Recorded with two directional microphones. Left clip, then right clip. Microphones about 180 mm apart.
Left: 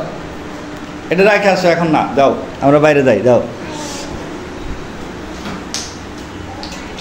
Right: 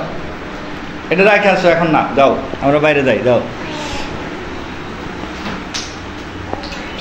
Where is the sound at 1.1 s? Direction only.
20° left (ahead or behind).